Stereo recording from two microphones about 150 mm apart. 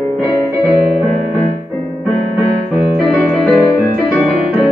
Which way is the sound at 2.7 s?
Centre (ahead or behind).